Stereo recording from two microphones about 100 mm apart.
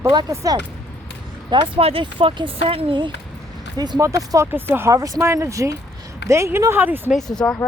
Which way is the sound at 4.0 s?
30° right (ahead or behind).